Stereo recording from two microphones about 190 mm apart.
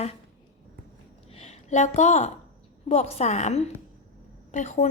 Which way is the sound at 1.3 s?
35° left (ahead or behind).